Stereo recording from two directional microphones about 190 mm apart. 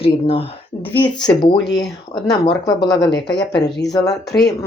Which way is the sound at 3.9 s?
20° left (ahead or behind).